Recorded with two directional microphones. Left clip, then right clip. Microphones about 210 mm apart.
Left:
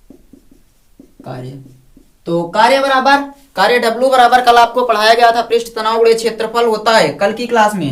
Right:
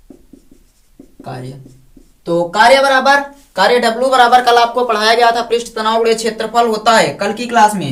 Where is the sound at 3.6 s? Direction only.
30° left (ahead or behind).